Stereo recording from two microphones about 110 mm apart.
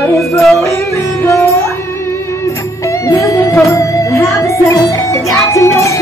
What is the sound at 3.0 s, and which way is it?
Music, 30° left (ahead or behind).